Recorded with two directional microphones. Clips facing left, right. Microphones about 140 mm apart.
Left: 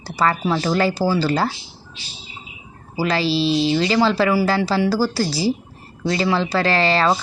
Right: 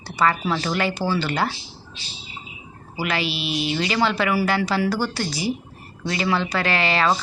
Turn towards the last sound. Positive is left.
turn(degrees=35)  # may be behind; listen again after turning